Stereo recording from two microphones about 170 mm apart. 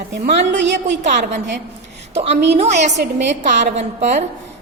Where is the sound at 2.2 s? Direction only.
40° right (ahead or behind).